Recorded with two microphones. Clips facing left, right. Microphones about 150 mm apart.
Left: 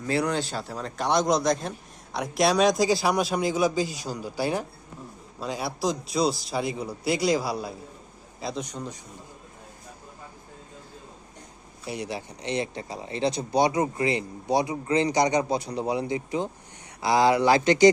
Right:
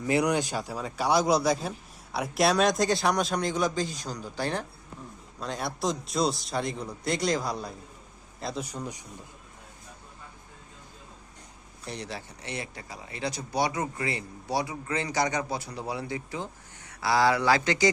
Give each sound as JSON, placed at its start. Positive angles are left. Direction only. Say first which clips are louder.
{"t": 0.0, "sound": "a man's voice", "louder": "right 1 dB", "side_deg": -15}
{"t": 11.9, "sound": "speech", "louder": "left 5 dB", "side_deg": 10}